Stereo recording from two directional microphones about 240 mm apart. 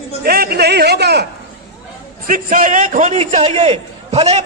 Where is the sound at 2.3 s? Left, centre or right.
Right.